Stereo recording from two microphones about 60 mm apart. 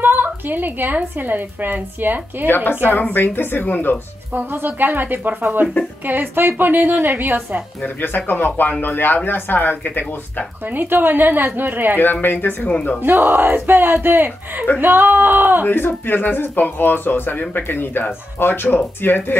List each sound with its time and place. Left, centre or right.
0.0 s a woman's voice: right
2.4 s speech: left
4.3 s a woman's voice: right
7.8 s speech: left
10.7 s a woman's voice: right
12.0 s speech: left
12.7 s speech: left
13.0 s a woman's voice: right
15.6 s speech: left